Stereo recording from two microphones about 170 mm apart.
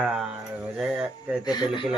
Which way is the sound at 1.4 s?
25° left (ahead or behind).